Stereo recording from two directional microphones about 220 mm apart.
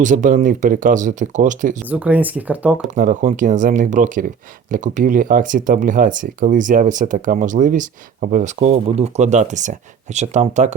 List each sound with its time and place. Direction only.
0.0 s speech: 35° right (ahead or behind)
1.8 s speech: 5° right (ahead or behind)
2.9 s speech: 35° right (ahead or behind)